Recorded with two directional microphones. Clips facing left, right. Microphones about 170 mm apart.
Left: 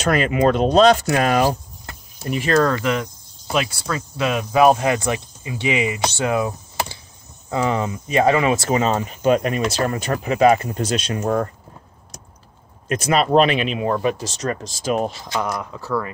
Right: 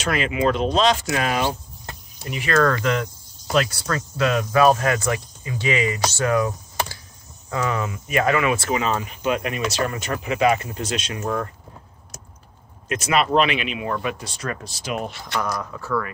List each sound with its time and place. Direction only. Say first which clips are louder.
0.0 s speech: left 4 dB; 45° left (ahead or behind)
2.6 s speech: left 1 dB; 20° left (ahead or behind)
8.5 s speech: left 4 dB; 40° left (ahead or behind)
12.8 s speech: left 2 dB; 35° left (ahead or behind)
14.8 s speech: left 8 dB; 40° left (ahead or behind)
15.3 s speech: right 1 dB; 20° left (ahead or behind)